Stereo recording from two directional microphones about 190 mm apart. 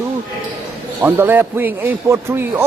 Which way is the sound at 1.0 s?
10° right (ahead or behind).